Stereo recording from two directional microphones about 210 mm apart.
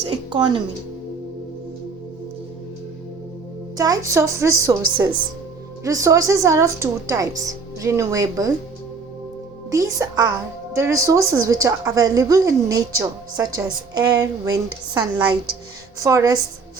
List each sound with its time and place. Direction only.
0.1 s a woman's voice: 20° right (ahead or behind)
3.8 s a woman's voice: 15° right (ahead or behind)
9.7 s a woman's voice: 15° right (ahead or behind)